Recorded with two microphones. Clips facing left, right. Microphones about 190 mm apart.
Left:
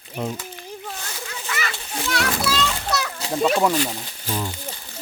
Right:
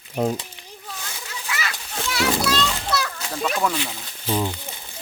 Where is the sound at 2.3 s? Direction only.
5° left (ahead or behind).